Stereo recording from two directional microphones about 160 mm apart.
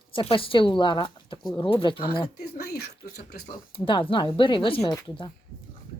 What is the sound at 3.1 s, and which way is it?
Speech, 85° left.